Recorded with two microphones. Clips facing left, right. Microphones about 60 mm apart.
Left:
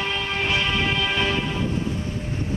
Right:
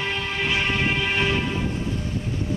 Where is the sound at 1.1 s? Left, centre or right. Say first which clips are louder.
Even; right.